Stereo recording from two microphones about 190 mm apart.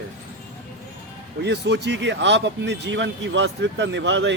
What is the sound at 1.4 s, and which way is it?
Speech, 65° right (ahead or behind).